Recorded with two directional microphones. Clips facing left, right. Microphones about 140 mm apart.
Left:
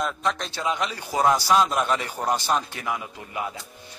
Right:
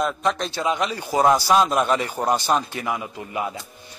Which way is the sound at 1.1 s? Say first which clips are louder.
Right 3 dB; 35° right (ahead or behind).